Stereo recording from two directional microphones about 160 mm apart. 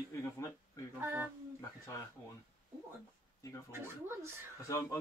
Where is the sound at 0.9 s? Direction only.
15° right (ahead or behind).